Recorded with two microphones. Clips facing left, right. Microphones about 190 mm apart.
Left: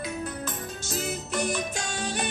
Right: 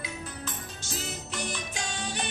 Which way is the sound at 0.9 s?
45° left (ahead or behind).